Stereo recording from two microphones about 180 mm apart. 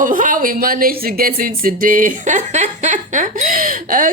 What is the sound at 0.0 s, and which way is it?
Speech, 50° right (ahead or behind).